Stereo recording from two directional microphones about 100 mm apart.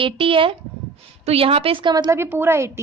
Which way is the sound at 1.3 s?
70° right (ahead or behind).